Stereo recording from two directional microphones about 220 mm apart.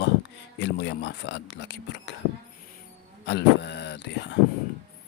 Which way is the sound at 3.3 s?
50° left (ahead or behind).